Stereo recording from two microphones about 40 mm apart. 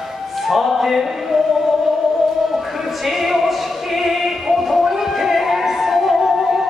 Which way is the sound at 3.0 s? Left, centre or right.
Centre.